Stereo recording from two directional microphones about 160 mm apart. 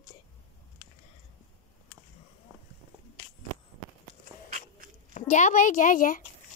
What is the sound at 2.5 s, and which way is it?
Run, 20° right (ahead or behind).